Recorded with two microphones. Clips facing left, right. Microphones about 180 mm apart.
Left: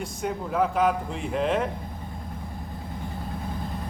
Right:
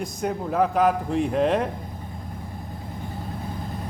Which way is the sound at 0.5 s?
40° right (ahead or behind).